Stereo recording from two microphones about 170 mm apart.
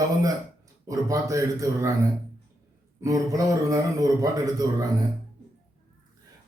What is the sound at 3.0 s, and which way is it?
A man's voice, 20° right (ahead or behind).